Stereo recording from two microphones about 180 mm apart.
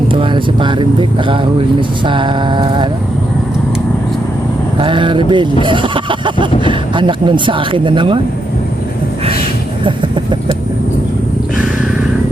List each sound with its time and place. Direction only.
0.1 s a sound: 25° right (ahead or behind)
2.0 s speech: 25° right (ahead or behind)
4.8 s speech: 25° right (ahead or behind)